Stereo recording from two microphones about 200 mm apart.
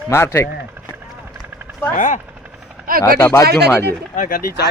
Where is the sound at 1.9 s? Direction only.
40° left (ahead or behind).